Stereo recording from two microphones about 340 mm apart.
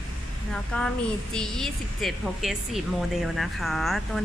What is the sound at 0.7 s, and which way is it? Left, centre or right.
A woman's voice, centre.